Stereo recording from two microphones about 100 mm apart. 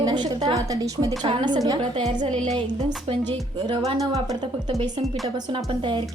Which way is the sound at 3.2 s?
45° right (ahead or behind).